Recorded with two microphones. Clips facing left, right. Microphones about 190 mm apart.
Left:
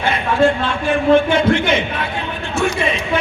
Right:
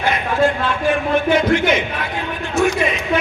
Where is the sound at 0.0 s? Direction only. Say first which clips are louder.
Left 2 dB; 30° left (ahead or behind).